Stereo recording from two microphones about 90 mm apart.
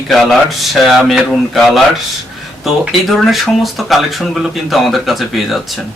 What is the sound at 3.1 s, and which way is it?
Speech, centre (ahead or behind).